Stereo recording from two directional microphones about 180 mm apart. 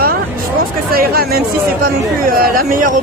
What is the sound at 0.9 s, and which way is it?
Speech, 55° right (ahead or behind).